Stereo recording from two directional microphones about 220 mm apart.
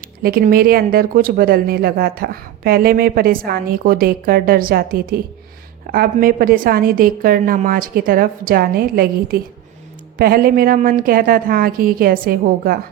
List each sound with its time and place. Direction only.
0.2 s a woman's voice: 45° right (ahead or behind)